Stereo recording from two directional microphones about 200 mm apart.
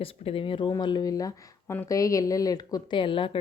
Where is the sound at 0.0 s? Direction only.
25° left (ahead or behind).